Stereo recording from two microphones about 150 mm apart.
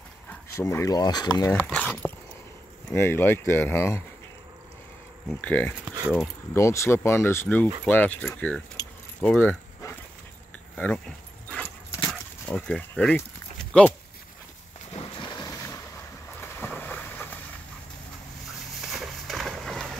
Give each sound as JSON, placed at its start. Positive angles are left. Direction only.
{"t": 0.3, "sound": "speech", "side_deg": 20}
{"t": 1.7, "sound": "speech", "side_deg": 10}
{"t": 5.4, "sound": "speech", "side_deg": 10}
{"t": 5.8, "sound": "speech", "side_deg": -10}
{"t": 6.5, "sound": "speech", "side_deg": 20}
{"t": 9.2, "sound": "keys jangling", "side_deg": 10}
{"t": 11.4, "sound": "dog", "side_deg": 10}
{"t": 12.1, "sound": "a sound", "side_deg": 5}
{"t": 13.7, "sound": "speech", "side_deg": 5}
{"t": 15.0, "sound": "boat", "side_deg": 30}
{"t": 18.8, "sound": "a sound", "side_deg": 0}